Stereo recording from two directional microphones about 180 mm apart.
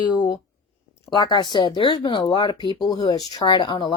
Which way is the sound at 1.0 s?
25° left (ahead or behind).